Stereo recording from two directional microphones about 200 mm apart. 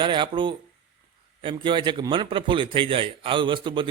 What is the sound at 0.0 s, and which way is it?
A man's voice, 25° right (ahead or behind).